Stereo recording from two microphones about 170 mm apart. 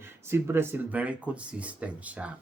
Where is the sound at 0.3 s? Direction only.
15° right (ahead or behind).